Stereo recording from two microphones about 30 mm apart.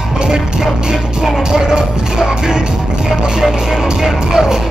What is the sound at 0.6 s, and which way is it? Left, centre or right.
Music, centre.